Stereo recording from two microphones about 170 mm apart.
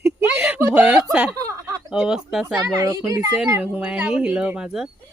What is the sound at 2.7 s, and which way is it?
Speech, 20° right (ahead or behind).